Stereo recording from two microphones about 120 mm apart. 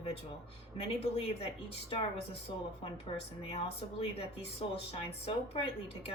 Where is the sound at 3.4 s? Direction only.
55° left (ahead or behind).